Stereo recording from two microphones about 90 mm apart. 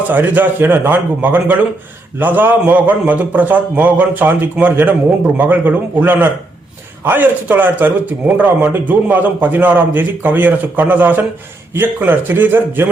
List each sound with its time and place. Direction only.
0.1 s a man's voice: 20° right (ahead or behind)